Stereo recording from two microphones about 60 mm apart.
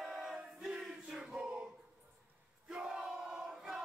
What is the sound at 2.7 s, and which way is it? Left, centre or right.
Crowd, centre.